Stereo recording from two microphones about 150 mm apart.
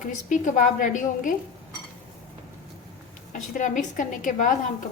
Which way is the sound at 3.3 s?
60° left (ahead or behind).